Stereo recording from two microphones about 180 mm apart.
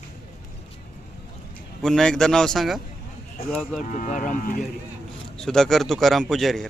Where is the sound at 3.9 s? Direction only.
45° left (ahead or behind).